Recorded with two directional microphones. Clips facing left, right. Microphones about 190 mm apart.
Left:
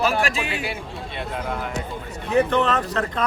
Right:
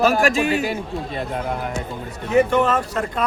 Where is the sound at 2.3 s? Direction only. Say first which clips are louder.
Right 3 dB; 10° right (ahead or behind).